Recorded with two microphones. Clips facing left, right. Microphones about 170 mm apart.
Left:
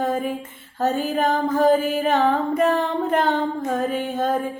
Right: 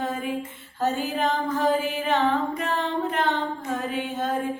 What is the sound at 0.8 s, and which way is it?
Female singing, 45° left (ahead or behind).